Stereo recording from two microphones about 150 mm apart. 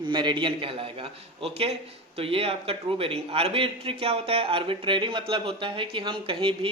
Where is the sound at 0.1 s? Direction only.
30° right (ahead or behind).